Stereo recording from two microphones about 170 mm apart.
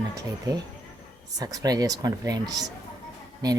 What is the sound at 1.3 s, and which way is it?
Speech, 20° right (ahead or behind).